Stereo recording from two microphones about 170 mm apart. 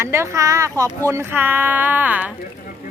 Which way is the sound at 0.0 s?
15° right (ahead or behind).